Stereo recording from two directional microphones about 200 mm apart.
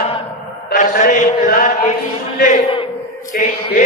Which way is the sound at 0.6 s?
40° left (ahead or behind).